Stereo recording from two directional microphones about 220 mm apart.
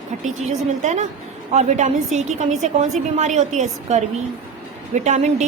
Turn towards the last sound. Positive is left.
turn(degrees=-30)  # may be behind; listen again after turning